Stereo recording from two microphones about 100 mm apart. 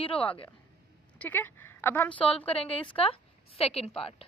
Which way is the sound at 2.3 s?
75° left (ahead or behind).